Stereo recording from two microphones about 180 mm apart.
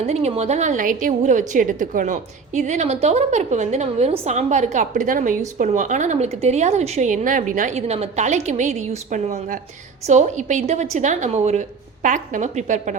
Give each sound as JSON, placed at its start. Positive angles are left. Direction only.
{"t": 0.0, "sound": "a woman's voice", "side_deg": -35}